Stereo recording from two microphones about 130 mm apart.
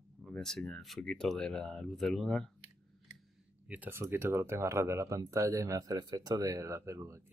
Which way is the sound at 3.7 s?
15° right (ahead or behind).